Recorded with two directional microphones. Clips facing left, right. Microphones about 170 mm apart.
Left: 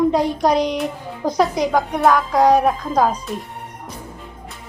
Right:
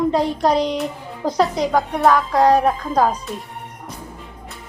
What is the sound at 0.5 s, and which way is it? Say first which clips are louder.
Speech: left 1 dB; 15° left (ahead or behind).